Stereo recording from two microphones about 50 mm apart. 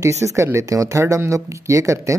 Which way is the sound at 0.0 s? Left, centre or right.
Right.